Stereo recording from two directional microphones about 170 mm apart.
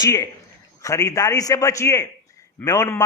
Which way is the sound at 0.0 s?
20° left (ahead or behind).